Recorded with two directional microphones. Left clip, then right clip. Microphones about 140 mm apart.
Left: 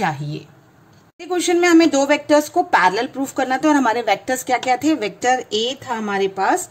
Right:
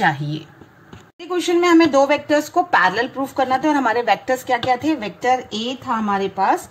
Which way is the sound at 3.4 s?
90° left.